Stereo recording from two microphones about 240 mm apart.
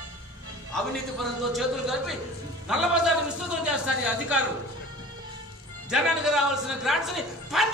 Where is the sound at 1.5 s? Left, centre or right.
Centre.